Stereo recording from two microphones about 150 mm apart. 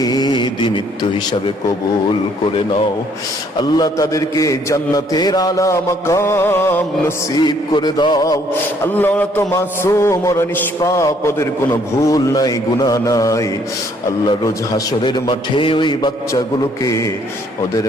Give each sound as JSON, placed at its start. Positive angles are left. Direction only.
{"t": 0.0, "sound": "mantra", "side_deg": 25}
{"t": 3.6, "sound": "a man's voice", "side_deg": 25}
{"t": 7.3, "sound": "a man's voice", "side_deg": 30}
{"t": 8.8, "sound": "a man's voice", "side_deg": 15}